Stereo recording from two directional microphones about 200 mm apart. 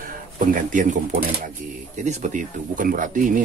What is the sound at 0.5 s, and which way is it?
Speech, 40° right (ahead or behind).